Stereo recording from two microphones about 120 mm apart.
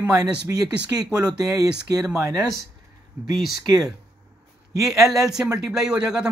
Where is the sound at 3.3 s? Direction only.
Centre (ahead or behind).